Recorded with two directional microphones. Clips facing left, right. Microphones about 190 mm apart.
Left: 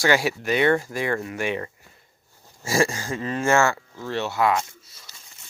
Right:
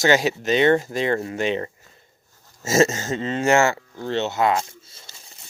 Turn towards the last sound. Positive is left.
turn(degrees=-25)  # may be behind; listen again after turning